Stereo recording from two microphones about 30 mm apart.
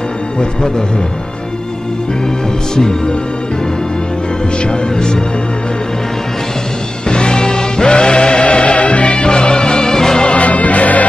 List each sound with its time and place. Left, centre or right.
0.4 s speech: left
2.7 s speech: left
4.6 s speech: left
7.1 s music: left
10.2 s music: left